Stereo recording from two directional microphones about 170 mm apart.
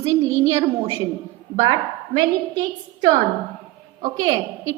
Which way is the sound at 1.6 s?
25° right (ahead or behind).